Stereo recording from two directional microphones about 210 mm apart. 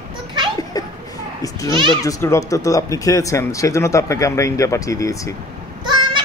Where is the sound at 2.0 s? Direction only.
15° left (ahead or behind).